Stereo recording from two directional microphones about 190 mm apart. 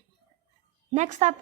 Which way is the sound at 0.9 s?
35° right (ahead or behind).